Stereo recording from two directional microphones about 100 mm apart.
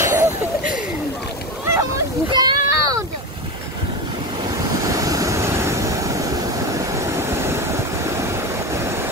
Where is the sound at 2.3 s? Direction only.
40° right (ahead or behind).